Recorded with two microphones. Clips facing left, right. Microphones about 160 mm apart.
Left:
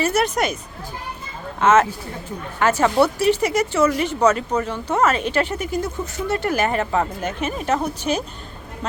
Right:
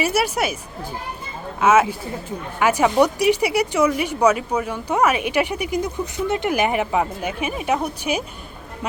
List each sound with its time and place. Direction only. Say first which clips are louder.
0.0 s speech: left 1 dB; 10° right (ahead or behind)
1.6 s speech: even; 10° right (ahead or behind)